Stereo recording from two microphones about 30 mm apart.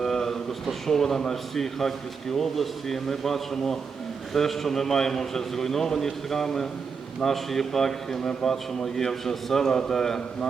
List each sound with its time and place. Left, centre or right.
0.0 s a man's voice: centre
8.2 s a man's voice: left